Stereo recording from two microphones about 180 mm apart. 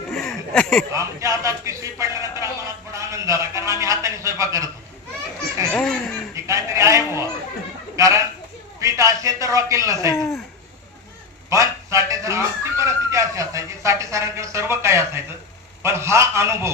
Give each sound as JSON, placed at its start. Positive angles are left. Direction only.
{"t": 0.1, "sound": "a sound", "side_deg": 0}
{"t": 0.9, "sound": "a man's voice", "side_deg": -15}
{"t": 5.7, "sound": "a sound", "side_deg": 5}
{"t": 6.3, "sound": "a man's voice", "side_deg": -15}
{"t": 10.2, "sound": "speech", "side_deg": 0}
{"t": 11.4, "sound": "a man's voice", "side_deg": -15}